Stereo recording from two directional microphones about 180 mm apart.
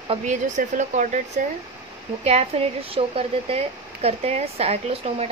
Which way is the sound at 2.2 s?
35° right (ahead or behind).